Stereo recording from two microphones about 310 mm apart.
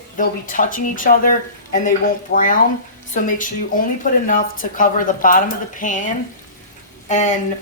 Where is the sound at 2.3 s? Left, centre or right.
Left.